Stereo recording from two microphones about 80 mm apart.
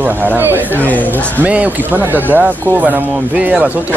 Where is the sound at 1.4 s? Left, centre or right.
Centre.